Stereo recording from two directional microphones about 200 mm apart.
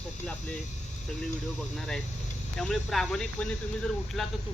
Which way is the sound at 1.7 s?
5° left (ahead or behind).